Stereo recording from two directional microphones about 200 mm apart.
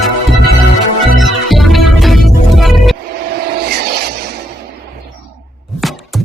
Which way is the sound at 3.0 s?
50° right (ahead or behind).